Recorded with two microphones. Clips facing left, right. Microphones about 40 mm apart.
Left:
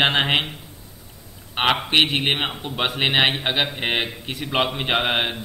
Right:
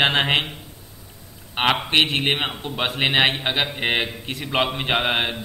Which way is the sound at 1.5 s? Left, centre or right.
Centre.